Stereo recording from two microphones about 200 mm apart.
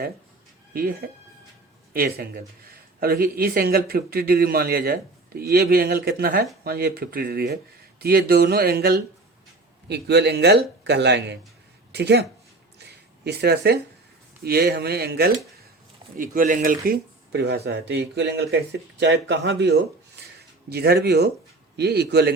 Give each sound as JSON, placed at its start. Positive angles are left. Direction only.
{"t": 0.7, "sound": "a man's voice", "side_deg": -45}
{"t": 13.2, "sound": "a man's voice", "side_deg": -55}